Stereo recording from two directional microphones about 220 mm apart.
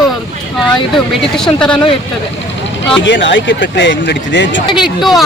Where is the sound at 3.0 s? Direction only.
55° left (ahead or behind).